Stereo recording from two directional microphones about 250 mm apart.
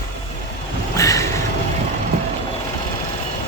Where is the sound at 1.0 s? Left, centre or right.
Centre.